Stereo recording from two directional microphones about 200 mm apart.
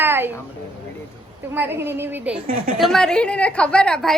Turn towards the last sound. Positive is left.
turn(degrees=5)  # may be behind; listen again after turning